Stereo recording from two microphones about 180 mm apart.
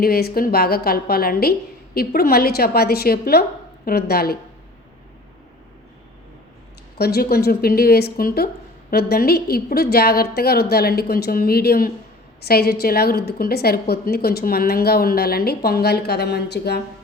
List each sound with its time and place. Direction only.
0.0 s a woman's voice: 60° left (ahead or behind)
7.0 s a woman's voice: 60° left (ahead or behind)